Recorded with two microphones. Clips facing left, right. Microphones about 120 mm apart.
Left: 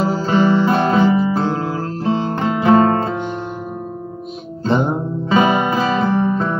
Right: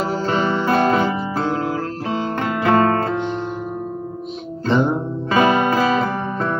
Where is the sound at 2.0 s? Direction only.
35° left (ahead or behind).